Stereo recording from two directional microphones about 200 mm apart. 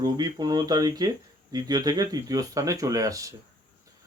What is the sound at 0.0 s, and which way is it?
Speech, 20° right (ahead or behind).